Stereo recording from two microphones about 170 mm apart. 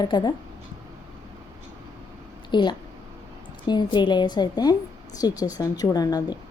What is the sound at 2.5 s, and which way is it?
A woman's voice, 25° left (ahead or behind).